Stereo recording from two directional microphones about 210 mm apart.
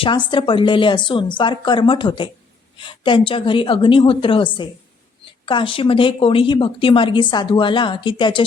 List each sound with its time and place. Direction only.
0.0 s speech: 20° left (ahead or behind)